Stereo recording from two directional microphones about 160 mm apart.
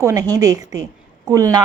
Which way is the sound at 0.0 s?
20° right (ahead or behind).